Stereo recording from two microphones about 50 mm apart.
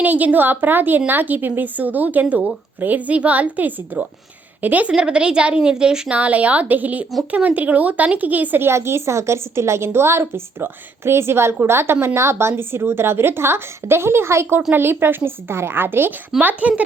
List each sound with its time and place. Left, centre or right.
0.0 s a woman's voice: right
4.9 s a woman's voice: centre
6.1 s a woman's voice: right
8.6 s a woman's voice: right
14.7 s a woman's voice: right
16.4 s a woman's voice: right